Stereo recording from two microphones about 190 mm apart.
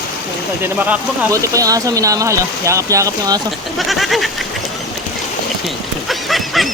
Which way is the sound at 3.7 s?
Centre (ahead or behind).